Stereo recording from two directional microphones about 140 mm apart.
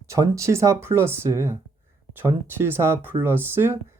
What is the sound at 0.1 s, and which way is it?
Speech, 20° right (ahead or behind).